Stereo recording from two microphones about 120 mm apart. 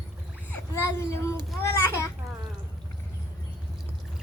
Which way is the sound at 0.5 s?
25° left (ahead or behind).